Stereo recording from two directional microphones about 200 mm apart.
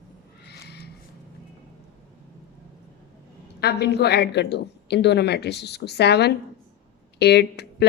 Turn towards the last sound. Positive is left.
turn(degrees=55)  # may be behind; listen again after turning